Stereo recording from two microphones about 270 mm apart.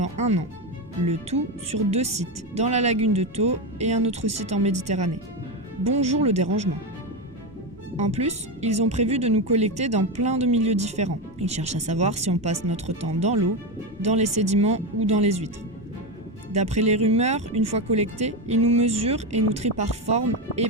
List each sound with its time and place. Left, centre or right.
0.0 s speech: right
1.9 s speech: right
7.9 s speech: right
16.5 s speech: right